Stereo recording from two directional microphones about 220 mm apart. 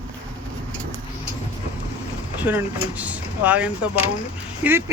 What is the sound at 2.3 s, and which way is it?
Speech, 10° right (ahead or behind).